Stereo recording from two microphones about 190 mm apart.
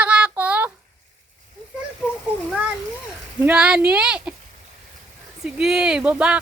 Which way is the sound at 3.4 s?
5° right (ahead or behind).